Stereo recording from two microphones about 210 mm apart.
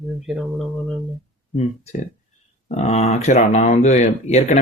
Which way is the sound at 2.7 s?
30° left (ahead or behind).